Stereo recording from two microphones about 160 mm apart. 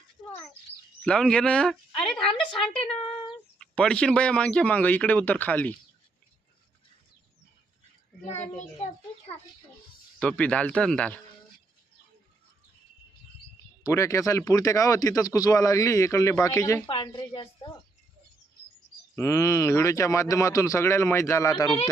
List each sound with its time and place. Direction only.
1.0 s a man's voice: 5° left (ahead or behind)
2.1 s speech: 30° left (ahead or behind)
3.6 s speech: 5° left (ahead or behind)
10.2 s speech: 5° left (ahead or behind)
13.8 s speech: 20° left (ahead or behind)
16.9 s a woman's voice: 30° left (ahead or behind)
19.1 s speech: 15° left (ahead or behind)